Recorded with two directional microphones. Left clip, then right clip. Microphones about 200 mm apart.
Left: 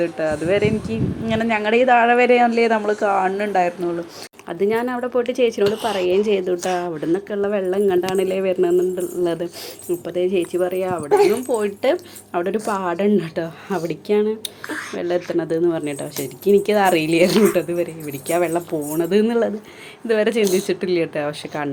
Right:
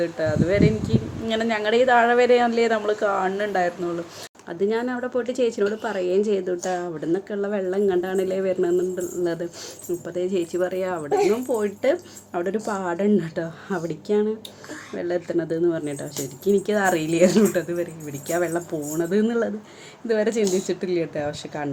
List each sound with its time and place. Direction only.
0.0 s speech: 10° left (ahead or behind)
20.4 s speech: 35° left (ahead or behind)
20.7 s speech: 5° left (ahead or behind)